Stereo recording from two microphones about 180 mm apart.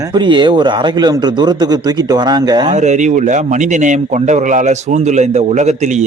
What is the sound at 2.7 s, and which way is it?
A man's voice, 40° right (ahead or behind).